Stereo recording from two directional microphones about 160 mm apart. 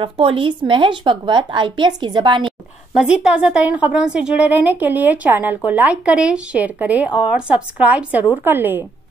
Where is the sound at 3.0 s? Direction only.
5° right (ahead or behind).